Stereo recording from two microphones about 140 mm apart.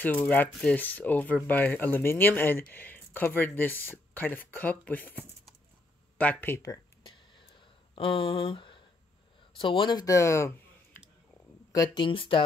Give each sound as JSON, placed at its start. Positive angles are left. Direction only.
{"t": 0.0, "sound": "speech", "side_deg": 10}
{"t": 6.1, "sound": "a sound", "side_deg": 15}
{"t": 9.6, "sound": "speech", "side_deg": 35}
{"t": 11.7, "sound": "speech", "side_deg": 30}